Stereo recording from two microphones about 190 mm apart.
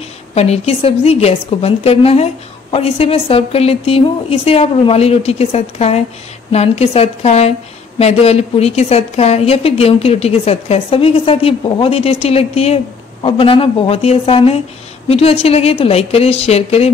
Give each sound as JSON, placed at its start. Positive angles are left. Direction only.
{"t": 0.3, "sound": "a woman's voice", "side_deg": 35}